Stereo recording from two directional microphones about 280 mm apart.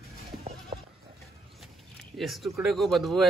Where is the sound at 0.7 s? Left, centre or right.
Centre.